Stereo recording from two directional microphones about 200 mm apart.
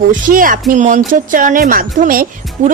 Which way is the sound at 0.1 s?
45° right (ahead or behind).